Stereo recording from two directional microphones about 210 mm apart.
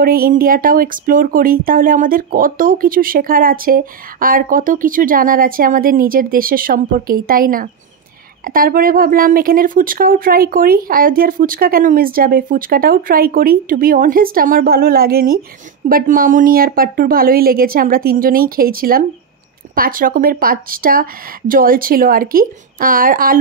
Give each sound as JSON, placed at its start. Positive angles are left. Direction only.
{"t": 0.0, "sound": "speech", "side_deg": -45}